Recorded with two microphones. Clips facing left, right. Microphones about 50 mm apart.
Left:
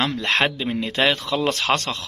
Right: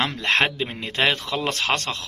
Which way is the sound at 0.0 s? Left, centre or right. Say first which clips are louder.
Even; right.